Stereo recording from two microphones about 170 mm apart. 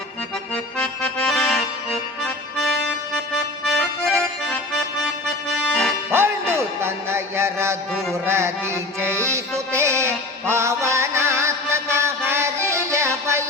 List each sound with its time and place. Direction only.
0.5 s accordion: 5° left (ahead or behind)
3.7 s accordion: centre (ahead or behind)
5.5 s accordion: 5° left (ahead or behind)
6.1 s music: 15° right (ahead or behind)